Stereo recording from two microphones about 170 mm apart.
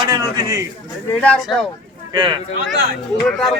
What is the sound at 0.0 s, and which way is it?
Speech, 20° right (ahead or behind).